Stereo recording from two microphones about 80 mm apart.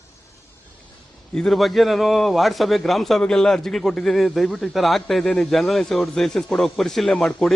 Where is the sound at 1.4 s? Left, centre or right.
Centre.